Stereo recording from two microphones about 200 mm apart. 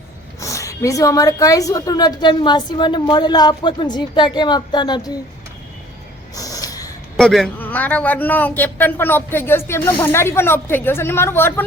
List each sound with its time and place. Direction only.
0.3 s a woman's voice: 15° left (ahead or behind)
6.3 s snort: 15° left (ahead or behind)
7.2 s a man's voice: centre (ahead or behind)